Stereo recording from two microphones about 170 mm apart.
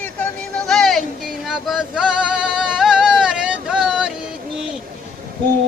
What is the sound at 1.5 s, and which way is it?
Male singing, centre (ahead or behind).